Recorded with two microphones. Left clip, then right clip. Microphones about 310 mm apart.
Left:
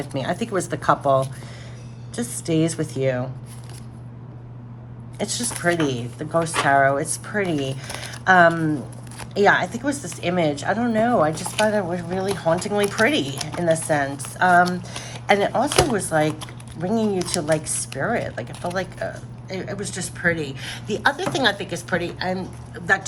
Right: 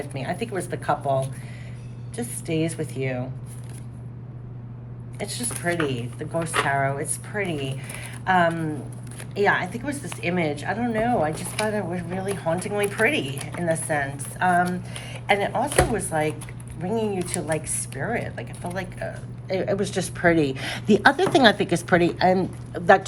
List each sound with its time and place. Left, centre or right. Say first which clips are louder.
0.1 s speech: left 8 dB; centre
5.2 s speech: left 5 dB; left
19.5 s a woman's voice: right 6 dB; centre